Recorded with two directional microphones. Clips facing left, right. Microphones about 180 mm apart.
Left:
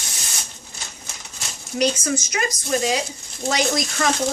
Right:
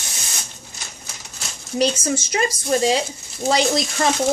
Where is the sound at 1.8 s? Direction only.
30° right (ahead or behind).